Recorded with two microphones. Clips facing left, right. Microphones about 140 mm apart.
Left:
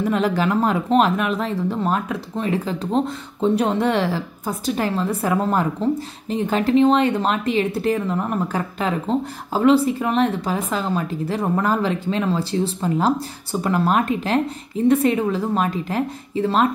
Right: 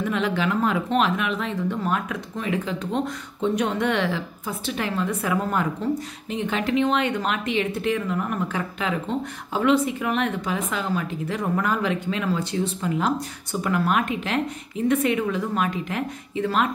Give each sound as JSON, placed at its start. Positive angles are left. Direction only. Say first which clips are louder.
{"t": 0.0, "sound": "speech", "louder": "left 4 dB", "side_deg": 40}